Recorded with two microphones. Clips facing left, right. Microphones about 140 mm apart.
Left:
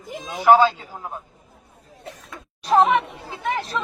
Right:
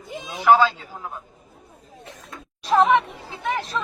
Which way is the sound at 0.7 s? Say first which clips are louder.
Left 1 dB; 15° left (ahead or behind).